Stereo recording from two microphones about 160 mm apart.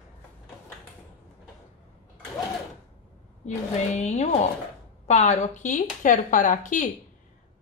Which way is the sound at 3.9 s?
45° left (ahead or behind).